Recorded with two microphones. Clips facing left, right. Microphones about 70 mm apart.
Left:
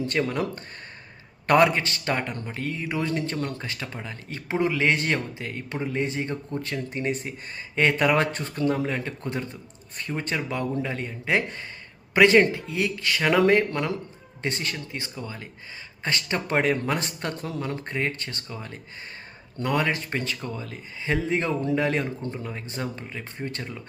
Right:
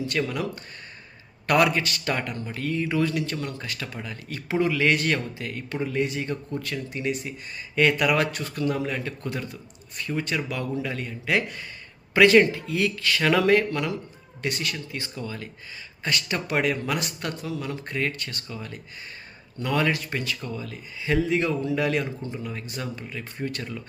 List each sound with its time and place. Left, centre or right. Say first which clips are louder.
0.0 s speech: left 1 dB; left